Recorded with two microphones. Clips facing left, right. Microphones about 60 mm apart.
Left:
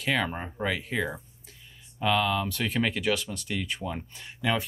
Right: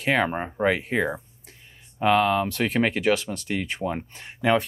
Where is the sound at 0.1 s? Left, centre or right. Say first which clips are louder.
Right 5 dB; right.